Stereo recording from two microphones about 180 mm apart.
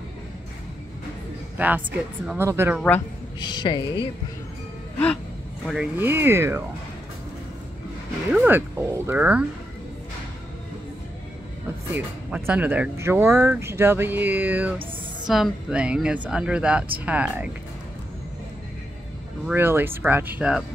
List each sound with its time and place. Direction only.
2.2 s speech: 15° right (ahead or behind)
3.3 s speech: 25° left (ahead or behind)
4.9 s music: 5° left (ahead or behind)
5.7 s speech: 10° right (ahead or behind)
8.3 s speech: 10° right (ahead or behind)
11.9 s speech: 10° right (ahead or behind)
19.4 s speech: 10° right (ahead or behind)